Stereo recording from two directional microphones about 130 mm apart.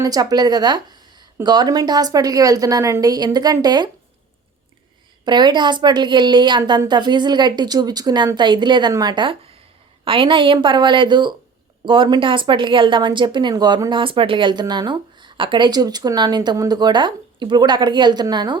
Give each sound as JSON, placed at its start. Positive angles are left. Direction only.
{"t": 0.0, "sound": "a woman's voice", "side_deg": -30}
{"t": 5.2, "sound": "speech", "side_deg": -35}
{"t": 14.0, "sound": "speech", "side_deg": -40}